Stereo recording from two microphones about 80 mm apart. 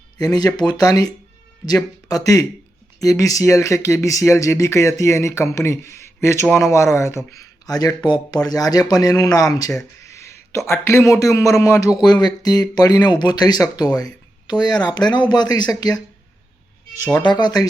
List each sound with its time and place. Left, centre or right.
0.2 s speech: left
7.7 s speech: left
10.0 s a sound: left
10.7 s speech: left
12.0 s speech: left
17.2 s speech: left